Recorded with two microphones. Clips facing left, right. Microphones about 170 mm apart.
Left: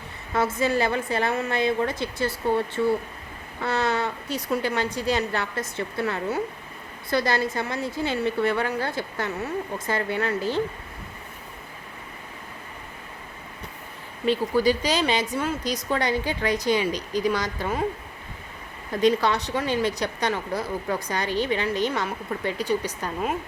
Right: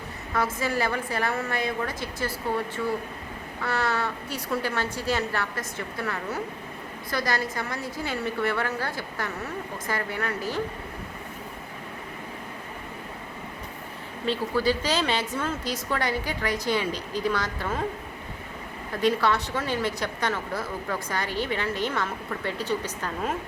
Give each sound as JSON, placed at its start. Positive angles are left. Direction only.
{"t": 0.3, "sound": "a woman's voice", "side_deg": 25}
{"t": 14.3, "sound": "a woman's voice", "side_deg": 15}
{"t": 19.0, "sound": "a woman's voice", "side_deg": 20}